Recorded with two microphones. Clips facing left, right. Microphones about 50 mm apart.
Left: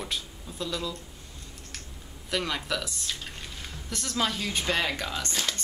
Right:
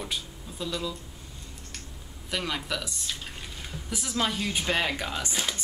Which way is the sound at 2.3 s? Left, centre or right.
Centre.